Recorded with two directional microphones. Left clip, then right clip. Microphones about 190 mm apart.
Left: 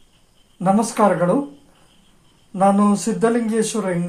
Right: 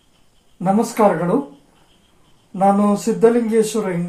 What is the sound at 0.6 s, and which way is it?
Speech, 15° left (ahead or behind).